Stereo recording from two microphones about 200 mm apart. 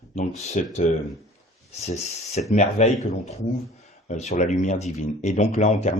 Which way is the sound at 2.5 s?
35° left (ahead or behind).